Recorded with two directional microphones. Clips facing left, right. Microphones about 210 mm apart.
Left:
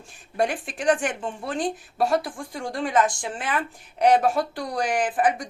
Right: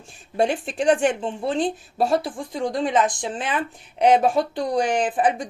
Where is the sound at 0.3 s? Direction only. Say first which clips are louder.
Right 4 dB; 25° right (ahead or behind).